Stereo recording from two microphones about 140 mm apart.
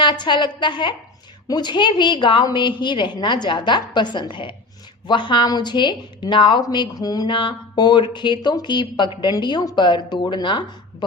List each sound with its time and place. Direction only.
0.0 s a woman's voice: 35° left (ahead or behind)